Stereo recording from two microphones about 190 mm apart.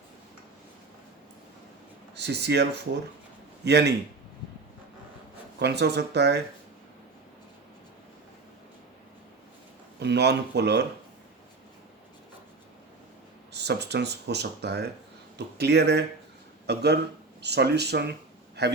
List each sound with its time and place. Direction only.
2.1 s speech: 60° right (ahead or behind)
5.5 s speech: 60° right (ahead or behind)
10.0 s speech: 60° right (ahead or behind)
13.5 s speech: 60° right (ahead or behind)